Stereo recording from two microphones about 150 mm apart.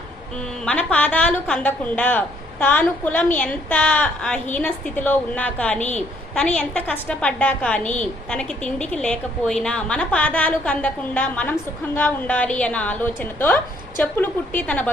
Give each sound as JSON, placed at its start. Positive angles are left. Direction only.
{"t": 0.6, "sound": "a woman's voice", "side_deg": 10}